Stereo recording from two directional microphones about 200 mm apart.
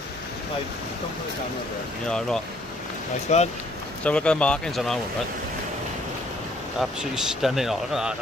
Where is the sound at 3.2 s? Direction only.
35° left (ahead or behind).